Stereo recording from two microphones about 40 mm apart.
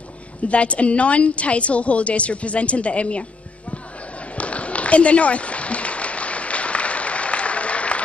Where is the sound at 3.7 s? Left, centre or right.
Left.